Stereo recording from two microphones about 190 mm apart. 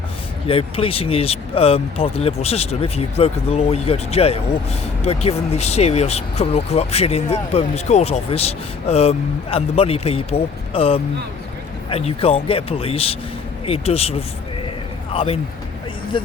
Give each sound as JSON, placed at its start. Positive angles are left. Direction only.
{"t": 0.4, "sound": "a man's voice", "side_deg": 30}